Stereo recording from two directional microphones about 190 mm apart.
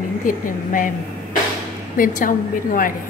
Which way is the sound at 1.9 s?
45° left (ahead or behind).